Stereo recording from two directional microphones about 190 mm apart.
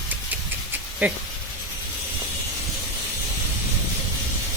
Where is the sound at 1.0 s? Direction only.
10° right (ahead or behind).